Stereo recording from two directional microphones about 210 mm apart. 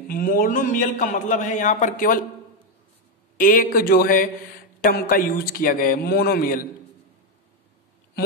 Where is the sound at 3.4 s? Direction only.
40° left (ahead or behind).